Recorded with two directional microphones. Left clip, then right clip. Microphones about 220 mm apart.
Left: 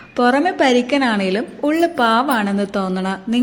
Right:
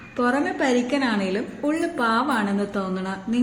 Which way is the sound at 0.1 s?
35° left (ahead or behind).